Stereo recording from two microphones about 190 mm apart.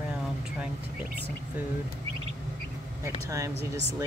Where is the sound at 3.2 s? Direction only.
15° right (ahead or behind).